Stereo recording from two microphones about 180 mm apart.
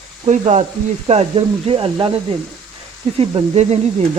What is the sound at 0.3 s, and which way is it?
Speech, 40° right (ahead or behind).